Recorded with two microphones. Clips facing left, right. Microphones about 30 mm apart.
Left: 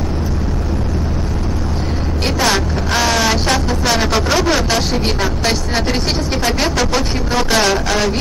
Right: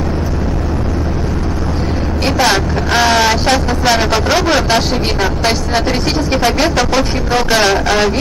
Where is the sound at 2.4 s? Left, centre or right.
Centre.